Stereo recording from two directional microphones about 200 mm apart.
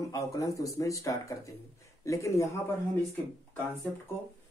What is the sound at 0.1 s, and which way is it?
Speech, 15° left (ahead or behind).